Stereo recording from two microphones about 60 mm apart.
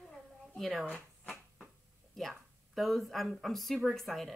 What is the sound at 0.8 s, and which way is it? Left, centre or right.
Speech, left.